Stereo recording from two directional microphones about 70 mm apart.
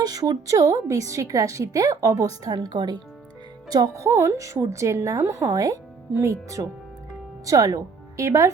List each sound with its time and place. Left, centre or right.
0.0 s a woman's voice: right
3.7 s a woman's voice: right
7.4 s speech: right